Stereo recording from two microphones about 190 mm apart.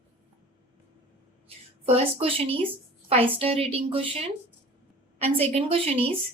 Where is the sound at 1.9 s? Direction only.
30° right (ahead or behind).